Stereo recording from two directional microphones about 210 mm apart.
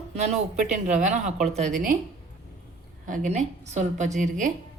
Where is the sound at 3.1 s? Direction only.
35° right (ahead or behind).